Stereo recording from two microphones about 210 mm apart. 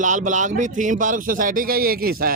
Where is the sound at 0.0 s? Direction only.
35° right (ahead or behind).